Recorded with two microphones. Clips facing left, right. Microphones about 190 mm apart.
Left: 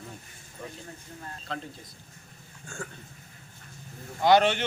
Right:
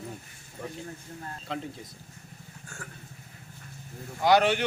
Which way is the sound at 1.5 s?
20° right (ahead or behind).